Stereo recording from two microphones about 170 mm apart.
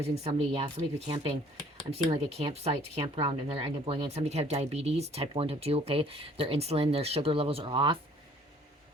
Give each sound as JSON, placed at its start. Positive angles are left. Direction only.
{"t": 0.0, "sound": "speech", "side_deg": -35}